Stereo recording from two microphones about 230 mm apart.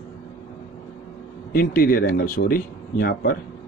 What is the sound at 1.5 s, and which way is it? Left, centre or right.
Speech, left.